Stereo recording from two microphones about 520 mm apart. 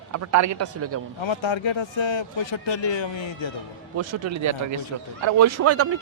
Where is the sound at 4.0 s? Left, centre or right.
Right.